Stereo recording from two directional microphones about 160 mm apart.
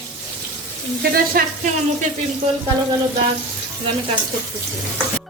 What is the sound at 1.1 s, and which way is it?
Sizzle, 70° right (ahead or behind).